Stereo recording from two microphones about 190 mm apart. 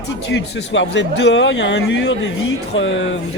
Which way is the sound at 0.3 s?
70° left (ahead or behind).